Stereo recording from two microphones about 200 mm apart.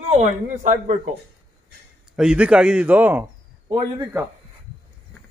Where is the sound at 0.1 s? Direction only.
40° right (ahead or behind).